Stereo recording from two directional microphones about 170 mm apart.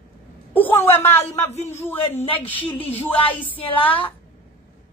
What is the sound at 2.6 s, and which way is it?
Speech, 30° left (ahead or behind).